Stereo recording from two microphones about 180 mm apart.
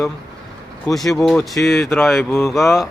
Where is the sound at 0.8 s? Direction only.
Centre (ahead or behind).